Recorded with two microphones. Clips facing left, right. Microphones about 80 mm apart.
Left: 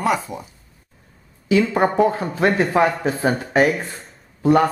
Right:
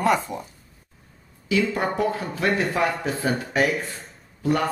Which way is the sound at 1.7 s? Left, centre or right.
Left.